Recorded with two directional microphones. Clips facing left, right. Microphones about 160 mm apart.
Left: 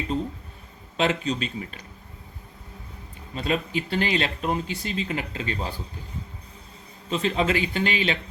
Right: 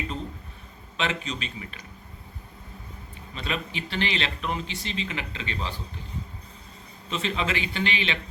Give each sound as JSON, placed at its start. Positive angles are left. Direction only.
{"t": 0.9, "sound": "a man's voice", "side_deg": 40}
{"t": 3.3, "sound": "speech", "side_deg": 40}
{"t": 7.1, "sound": "a man's voice", "side_deg": 40}